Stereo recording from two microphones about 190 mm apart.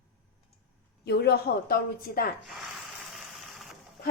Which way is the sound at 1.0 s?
60° left (ahead or behind).